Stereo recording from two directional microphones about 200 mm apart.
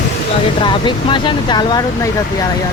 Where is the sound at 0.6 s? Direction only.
25° left (ahead or behind).